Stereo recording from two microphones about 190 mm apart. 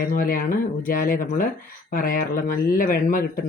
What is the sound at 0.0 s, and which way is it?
Speech, 50° left (ahead or behind).